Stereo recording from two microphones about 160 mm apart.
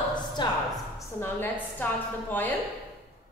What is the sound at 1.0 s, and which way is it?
A woman's voice, 15° left (ahead or behind).